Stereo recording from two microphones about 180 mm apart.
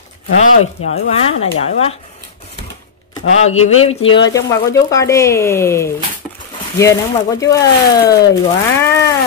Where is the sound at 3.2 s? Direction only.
35° left (ahead or behind).